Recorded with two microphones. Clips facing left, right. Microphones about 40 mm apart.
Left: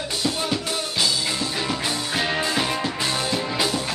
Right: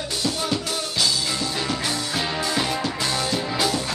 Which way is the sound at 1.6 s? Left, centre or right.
Centre.